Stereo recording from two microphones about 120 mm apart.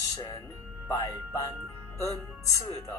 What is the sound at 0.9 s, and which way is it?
Speech, 30° left (ahead or behind).